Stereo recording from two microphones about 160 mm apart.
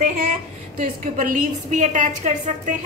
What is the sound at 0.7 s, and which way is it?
A woman's voice, 60° right (ahead or behind).